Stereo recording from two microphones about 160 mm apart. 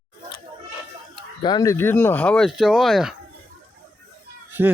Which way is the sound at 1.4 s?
25° left (ahead or behind).